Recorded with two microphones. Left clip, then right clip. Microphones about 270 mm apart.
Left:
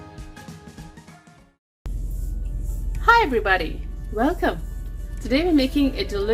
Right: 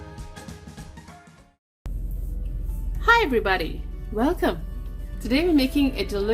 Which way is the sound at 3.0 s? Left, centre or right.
Right.